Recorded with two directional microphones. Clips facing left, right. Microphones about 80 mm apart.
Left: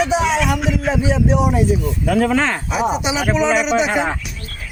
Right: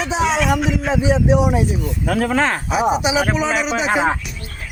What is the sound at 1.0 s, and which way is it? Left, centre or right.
Speech, centre.